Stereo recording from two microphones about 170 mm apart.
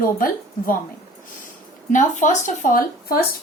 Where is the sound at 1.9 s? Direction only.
45° left (ahead or behind).